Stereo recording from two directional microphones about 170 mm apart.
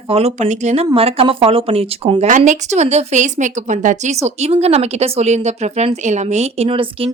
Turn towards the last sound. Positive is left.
turn(degrees=-35)  # may be behind; listen again after turning